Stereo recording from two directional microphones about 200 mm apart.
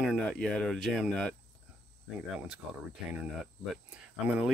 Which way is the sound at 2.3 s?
5° right (ahead or behind).